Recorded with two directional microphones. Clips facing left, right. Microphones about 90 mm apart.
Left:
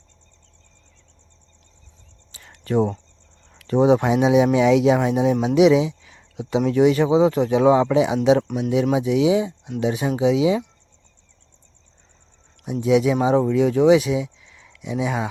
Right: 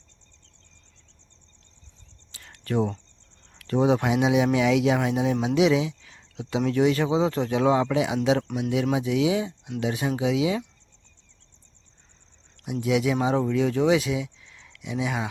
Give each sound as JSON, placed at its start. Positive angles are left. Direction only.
{"t": 2.3, "sound": "cricket", "side_deg": 20}
{"t": 3.7, "sound": "speech", "side_deg": 20}
{"t": 12.6, "sound": "speech", "side_deg": 25}